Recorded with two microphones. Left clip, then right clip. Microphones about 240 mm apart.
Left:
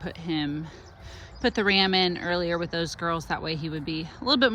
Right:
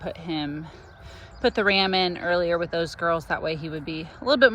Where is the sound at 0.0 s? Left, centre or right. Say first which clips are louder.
Even; centre.